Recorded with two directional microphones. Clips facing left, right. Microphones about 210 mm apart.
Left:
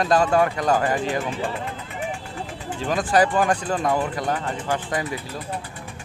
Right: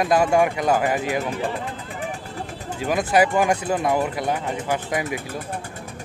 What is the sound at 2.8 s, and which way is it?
Speech, 10° right (ahead or behind).